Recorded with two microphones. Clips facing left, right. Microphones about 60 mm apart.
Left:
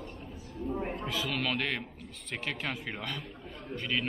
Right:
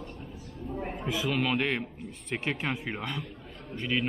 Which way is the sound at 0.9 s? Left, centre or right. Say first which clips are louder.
Right 3 dB; centre.